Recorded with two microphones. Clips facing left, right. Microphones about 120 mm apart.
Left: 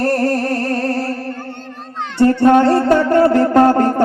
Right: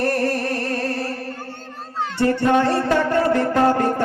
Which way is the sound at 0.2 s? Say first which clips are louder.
Left 5 dB; 30° left (ahead or behind).